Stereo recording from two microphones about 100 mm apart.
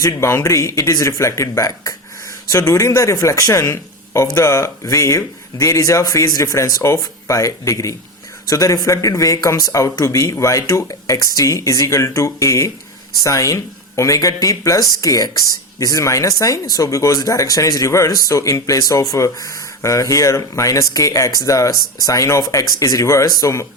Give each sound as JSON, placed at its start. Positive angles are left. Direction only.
{"t": 0.0, "sound": "speech", "side_deg": 30}